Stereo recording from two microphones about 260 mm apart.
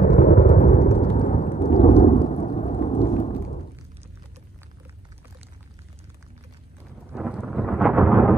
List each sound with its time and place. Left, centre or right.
0.0 s music: left
0.9 s thunder: left
7.2 s thunder: centre